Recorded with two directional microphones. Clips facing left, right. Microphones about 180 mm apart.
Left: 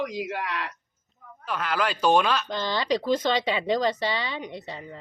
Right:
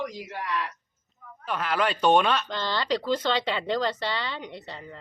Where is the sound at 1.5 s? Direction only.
Centre (ahead or behind).